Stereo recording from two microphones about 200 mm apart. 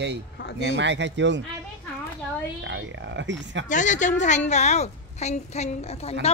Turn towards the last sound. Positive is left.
turn(degrees=30)  # may be behind; listen again after turning